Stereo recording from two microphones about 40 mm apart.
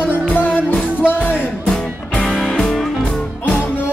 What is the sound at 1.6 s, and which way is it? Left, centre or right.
Music, centre.